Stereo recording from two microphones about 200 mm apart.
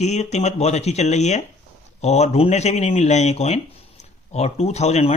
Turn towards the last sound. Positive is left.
turn(degrees=35)  # may be behind; listen again after turning